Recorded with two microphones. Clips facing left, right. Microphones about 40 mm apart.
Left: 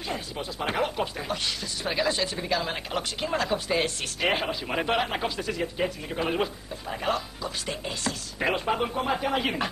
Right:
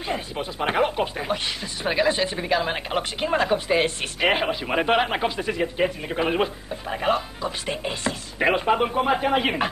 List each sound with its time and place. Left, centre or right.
0.1 s speech: right